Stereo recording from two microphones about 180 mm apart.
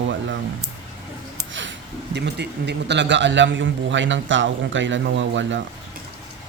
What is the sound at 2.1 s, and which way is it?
A man's voice, 70° right (ahead or behind).